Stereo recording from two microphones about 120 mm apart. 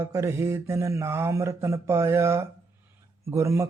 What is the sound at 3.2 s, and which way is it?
Speech, 25° right (ahead or behind).